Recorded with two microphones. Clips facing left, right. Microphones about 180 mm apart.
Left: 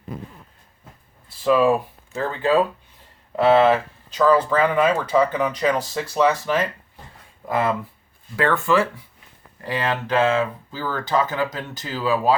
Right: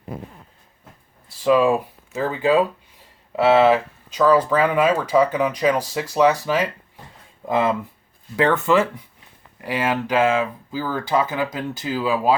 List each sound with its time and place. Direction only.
1.5 s speech: 10° right (ahead or behind)